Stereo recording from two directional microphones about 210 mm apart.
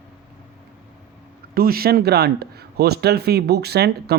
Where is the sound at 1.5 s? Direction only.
45° right (ahead or behind).